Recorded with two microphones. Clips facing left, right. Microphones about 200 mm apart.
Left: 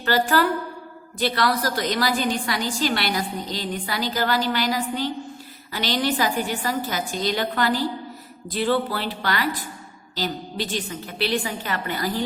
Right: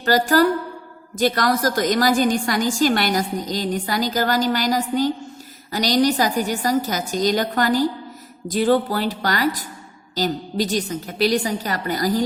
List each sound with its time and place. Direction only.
0.0 s a woman's voice: 40° right (ahead or behind)